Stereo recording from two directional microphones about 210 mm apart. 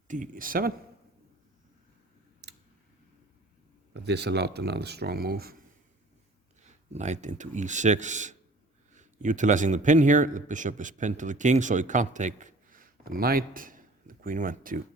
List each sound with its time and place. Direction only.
0.1 s a man's voice: 40° right (ahead or behind)
3.9 s speech: 50° right (ahead or behind)
6.6 s a man's voice: 35° right (ahead or behind)